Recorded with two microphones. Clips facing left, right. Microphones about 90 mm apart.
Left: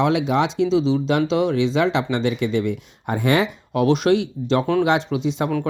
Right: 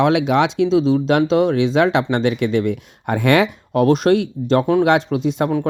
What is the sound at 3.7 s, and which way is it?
Speech, 45° right (ahead or behind).